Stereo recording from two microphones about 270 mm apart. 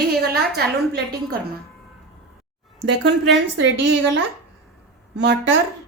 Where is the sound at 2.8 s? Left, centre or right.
Right.